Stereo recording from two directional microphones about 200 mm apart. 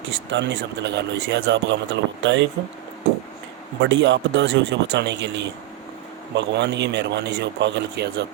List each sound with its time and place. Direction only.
0.3 s speech: 60° right (ahead or behind)
3.8 s speech: 65° right (ahead or behind)